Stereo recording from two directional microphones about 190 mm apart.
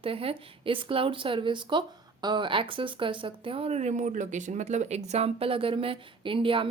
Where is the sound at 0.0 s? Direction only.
30° right (ahead or behind).